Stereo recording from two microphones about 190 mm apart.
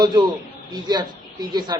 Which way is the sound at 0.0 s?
20° right (ahead or behind).